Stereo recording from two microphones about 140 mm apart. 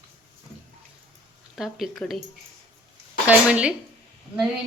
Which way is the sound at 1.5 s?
Centre (ahead or behind).